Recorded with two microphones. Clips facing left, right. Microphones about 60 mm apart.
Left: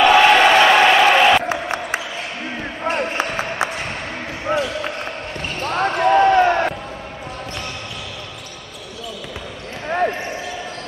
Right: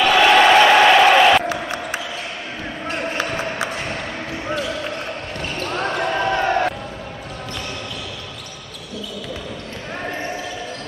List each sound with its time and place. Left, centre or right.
0.1 s crowd: centre
1.5 s a sound: left
2.8 s basketball bounce: left
3.3 s a sound: centre
4.5 s basketball bounce: left
5.4 s basketball bounce: centre
9.8 s basketball bounce: left